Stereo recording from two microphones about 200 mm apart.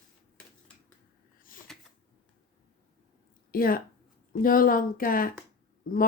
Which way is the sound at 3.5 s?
45° left (ahead or behind).